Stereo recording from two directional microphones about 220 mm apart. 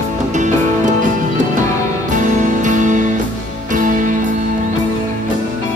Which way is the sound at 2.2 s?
35° right (ahead or behind).